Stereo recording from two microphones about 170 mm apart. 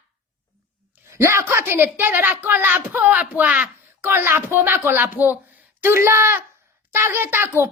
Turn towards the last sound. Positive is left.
turn(degrees=-15)  # may be behind; listen again after turning